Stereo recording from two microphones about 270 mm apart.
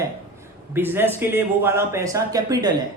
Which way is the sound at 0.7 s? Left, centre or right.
Centre.